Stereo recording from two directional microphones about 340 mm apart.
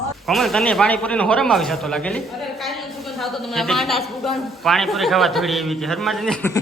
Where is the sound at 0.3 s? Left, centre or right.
Centre.